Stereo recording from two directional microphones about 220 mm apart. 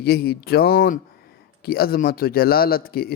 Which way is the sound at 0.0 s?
45° left (ahead or behind).